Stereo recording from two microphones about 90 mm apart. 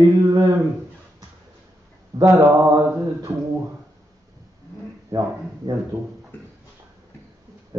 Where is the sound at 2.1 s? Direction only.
35° right (ahead or behind).